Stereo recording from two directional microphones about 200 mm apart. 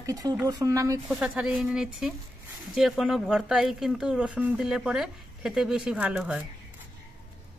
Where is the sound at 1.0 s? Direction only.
5° right (ahead or behind).